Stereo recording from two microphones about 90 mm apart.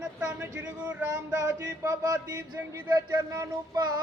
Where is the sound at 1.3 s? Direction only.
35° right (ahead or behind).